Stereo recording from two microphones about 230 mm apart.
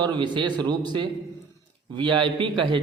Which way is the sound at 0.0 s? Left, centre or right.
Centre.